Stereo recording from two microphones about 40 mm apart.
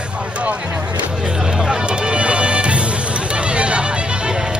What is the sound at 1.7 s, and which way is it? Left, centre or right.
Music, right.